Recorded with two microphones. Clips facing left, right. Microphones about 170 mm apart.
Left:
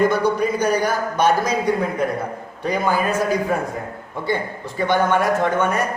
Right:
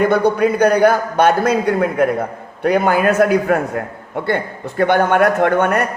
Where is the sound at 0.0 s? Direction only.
65° right (ahead or behind).